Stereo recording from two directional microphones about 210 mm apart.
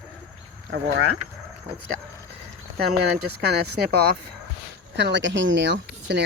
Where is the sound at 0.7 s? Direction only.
60° right (ahead or behind).